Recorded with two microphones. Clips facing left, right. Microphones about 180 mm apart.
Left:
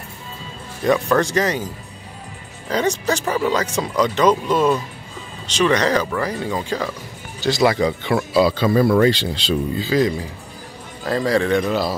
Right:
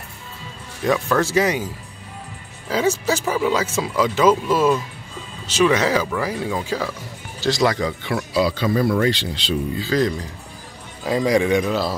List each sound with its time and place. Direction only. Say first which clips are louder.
0.8 s speech: left 2 dB; centre (ahead or behind)
2.7 s speech: even; 5° right (ahead or behind)
8.0 s speech: left 3 dB; 25° left (ahead or behind)
9.9 s speech: left 2 dB; centre (ahead or behind)
11.1 s a man's voice: right 1 dB; 15° right (ahead or behind)